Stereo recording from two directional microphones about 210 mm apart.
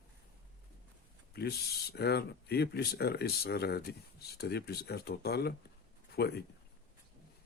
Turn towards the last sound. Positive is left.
turn(degrees=50)  # may be behind; listen again after turning